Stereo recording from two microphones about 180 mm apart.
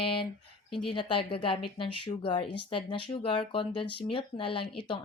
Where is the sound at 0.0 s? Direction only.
30° left (ahead or behind).